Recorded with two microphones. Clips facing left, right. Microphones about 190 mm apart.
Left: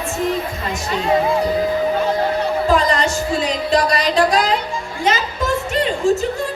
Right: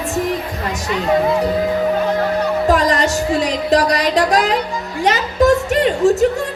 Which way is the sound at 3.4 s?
70° right (ahead or behind).